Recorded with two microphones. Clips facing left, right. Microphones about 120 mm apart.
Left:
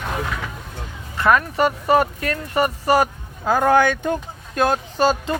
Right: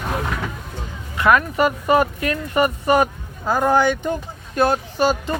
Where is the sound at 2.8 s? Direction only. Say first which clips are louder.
Even; 35° left (ahead or behind).